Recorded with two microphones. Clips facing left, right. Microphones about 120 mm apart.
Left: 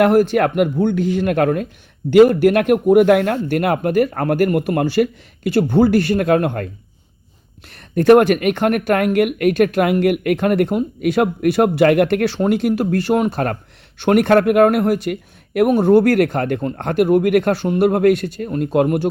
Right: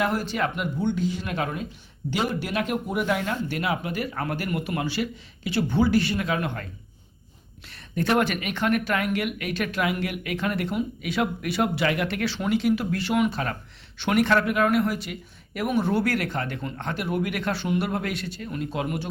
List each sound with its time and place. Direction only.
0.0 s speech: 55° left (ahead or behind)
7.7 s speech: 50° left (ahead or behind)